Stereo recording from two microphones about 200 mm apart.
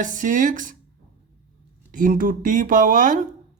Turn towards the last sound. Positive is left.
turn(degrees=-40)  # may be behind; listen again after turning